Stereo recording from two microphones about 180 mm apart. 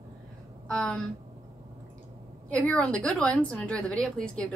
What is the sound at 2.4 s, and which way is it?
A woman's voice, 5° left (ahead or behind).